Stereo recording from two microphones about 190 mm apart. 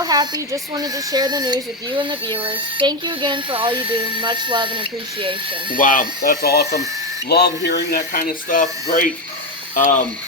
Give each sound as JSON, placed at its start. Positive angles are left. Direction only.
{"t": 0.0, "sound": "speech", "side_deg": -20}
{"t": 5.7, "sound": "speech", "side_deg": 45}